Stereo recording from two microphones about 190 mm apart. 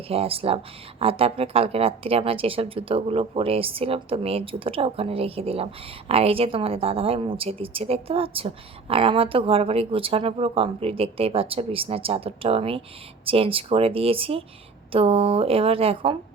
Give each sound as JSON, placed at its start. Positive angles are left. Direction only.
{"t": 0.1, "sound": "a woman's voice", "side_deg": -30}